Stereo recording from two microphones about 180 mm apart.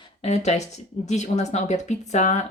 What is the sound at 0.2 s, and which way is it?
Speech, 40° left (ahead or behind).